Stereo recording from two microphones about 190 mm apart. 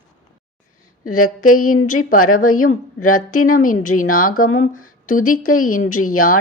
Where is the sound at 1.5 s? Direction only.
45° left (ahead or behind).